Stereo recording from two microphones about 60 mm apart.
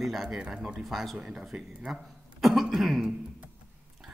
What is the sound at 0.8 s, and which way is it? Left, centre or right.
Speech, centre.